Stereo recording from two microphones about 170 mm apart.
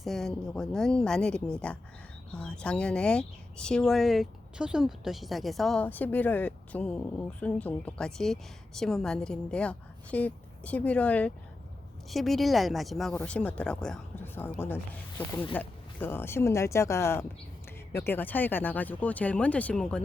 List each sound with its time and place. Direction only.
0.0 s speech: centre (ahead or behind)